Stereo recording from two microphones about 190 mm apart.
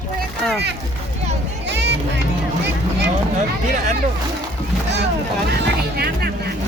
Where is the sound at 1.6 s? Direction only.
65° right (ahead or behind).